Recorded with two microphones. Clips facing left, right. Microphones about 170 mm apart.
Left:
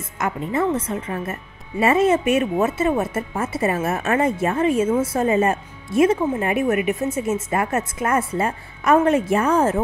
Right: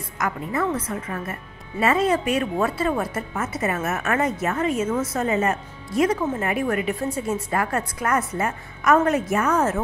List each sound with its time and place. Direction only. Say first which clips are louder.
0.2 s speech: left 3 dB; 25° left (ahead or behind)